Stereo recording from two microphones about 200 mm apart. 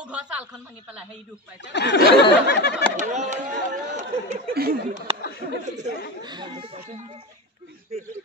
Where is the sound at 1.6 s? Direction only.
60° left (ahead or behind).